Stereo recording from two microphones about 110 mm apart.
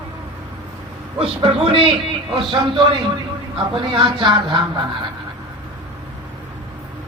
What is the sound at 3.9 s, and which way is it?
Speech, 50° right (ahead or behind).